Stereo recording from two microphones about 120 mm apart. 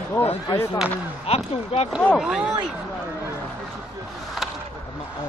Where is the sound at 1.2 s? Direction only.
55° left (ahead or behind).